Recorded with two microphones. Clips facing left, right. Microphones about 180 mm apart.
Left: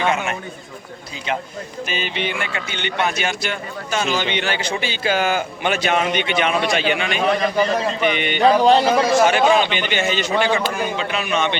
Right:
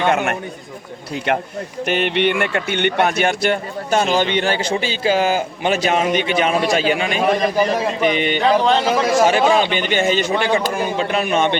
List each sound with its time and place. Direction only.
0.1 s a man's voice: 60° right (ahead or behind); by 7.1 s 40° right (ahead or behind)
7.2 s a man's voice: 15° right (ahead or behind)
8.0 s a man's voice: 35° right (ahead or behind)
8.8 s speech: 5° right (ahead or behind)
9.2 s a man's voice: 35° right (ahead or behind)
9.9 s a man's voice: 50° right (ahead or behind)